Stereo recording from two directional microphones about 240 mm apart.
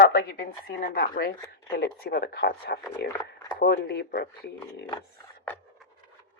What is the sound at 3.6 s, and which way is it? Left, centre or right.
Speech, left.